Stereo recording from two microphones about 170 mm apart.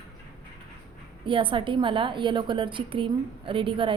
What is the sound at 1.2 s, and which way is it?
A woman's voice, 30° right (ahead or behind).